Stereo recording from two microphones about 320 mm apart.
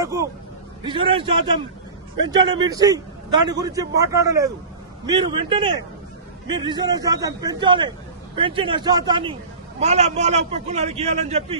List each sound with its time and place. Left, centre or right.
0.0 s a man's voice: centre